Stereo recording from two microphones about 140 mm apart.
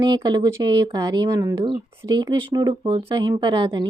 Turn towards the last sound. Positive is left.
turn(degrees=-30)  # may be behind; listen again after turning